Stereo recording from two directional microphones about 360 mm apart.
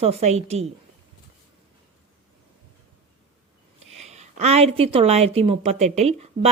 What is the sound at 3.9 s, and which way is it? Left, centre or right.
Speech, centre.